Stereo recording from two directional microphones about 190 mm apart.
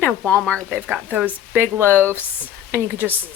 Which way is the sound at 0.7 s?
5° right (ahead or behind).